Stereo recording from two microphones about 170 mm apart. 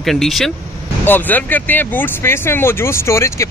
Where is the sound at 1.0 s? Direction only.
10° left (ahead or behind).